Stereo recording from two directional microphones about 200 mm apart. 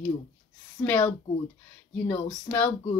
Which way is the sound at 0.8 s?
10° left (ahead or behind).